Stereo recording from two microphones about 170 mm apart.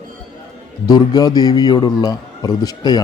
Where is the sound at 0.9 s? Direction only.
25° left (ahead or behind).